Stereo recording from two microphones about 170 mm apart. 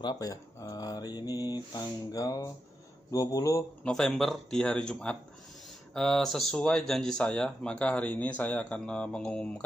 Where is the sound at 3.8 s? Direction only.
5° left (ahead or behind).